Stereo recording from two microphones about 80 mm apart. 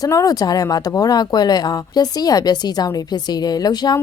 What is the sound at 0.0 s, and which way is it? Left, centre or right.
Speech, left.